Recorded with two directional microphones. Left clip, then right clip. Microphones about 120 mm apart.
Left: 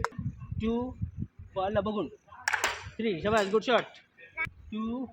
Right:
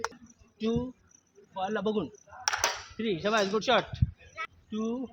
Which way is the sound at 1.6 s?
20° right (ahead or behind).